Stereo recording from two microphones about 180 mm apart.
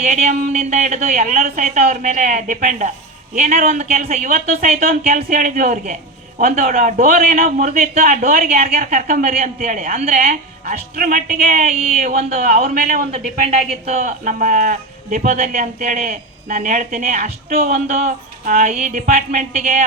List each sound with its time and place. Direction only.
0.0 s a woman's voice: 40° right (ahead or behind)